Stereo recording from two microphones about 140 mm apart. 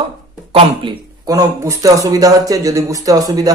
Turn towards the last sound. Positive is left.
turn(degrees=-25)  # may be behind; listen again after turning